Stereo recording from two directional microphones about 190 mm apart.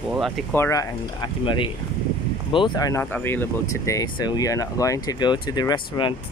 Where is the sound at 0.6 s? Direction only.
15° left (ahead or behind).